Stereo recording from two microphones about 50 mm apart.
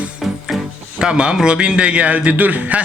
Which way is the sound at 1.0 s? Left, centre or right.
Centre.